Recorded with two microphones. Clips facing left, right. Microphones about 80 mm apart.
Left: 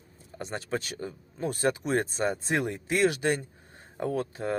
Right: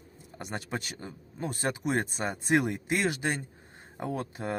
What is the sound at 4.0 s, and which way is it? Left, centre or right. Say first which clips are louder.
Speech: left 4 dB; centre.